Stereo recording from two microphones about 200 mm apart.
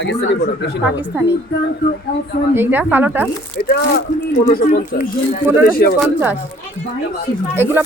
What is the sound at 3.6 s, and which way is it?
Speech, 50° left (ahead or behind).